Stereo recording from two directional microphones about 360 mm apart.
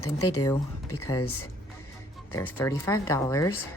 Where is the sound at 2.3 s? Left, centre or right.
Centre.